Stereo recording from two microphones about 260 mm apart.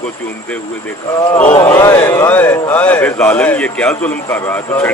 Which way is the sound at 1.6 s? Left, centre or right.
Centre.